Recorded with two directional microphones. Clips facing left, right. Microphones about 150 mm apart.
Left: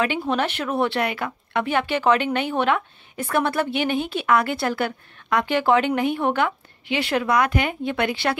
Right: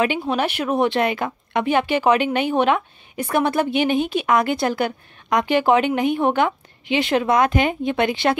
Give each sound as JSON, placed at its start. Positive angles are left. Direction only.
{"t": 0.0, "sound": "speech", "side_deg": -15}